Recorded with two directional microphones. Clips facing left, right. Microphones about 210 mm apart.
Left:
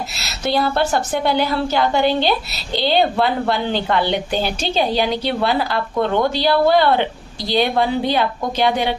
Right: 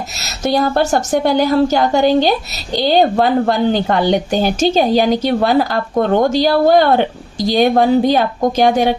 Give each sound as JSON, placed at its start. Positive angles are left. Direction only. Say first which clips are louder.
{"t": 0.2, "sound": "a woman's voice", "louder": "right 4 dB", "side_deg": -45}